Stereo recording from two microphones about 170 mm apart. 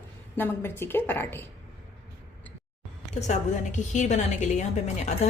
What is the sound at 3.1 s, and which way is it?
A woman's voice, 45° left (ahead or behind).